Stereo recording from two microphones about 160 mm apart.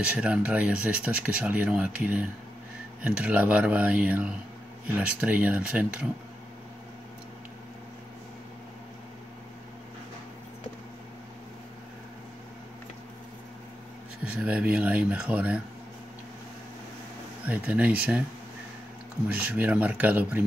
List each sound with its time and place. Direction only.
0.0 s speech: 10° right (ahead or behind)
14.2 s speech: 5° right (ahead or behind)
17.5 s speech: 10° right (ahead or behind)
19.4 s speech: 10° right (ahead or behind)